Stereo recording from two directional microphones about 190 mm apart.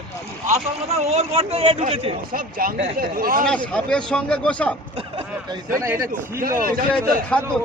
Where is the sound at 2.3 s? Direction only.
50° right (ahead or behind).